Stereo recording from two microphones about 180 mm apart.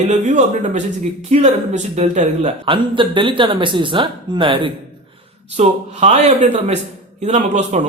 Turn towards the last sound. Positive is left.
turn(degrees=-40)  # may be behind; listen again after turning